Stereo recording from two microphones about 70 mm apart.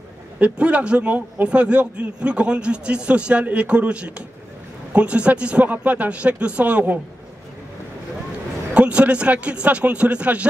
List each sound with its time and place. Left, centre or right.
0.4 s a man's voice: centre
8.7 s a man's voice: centre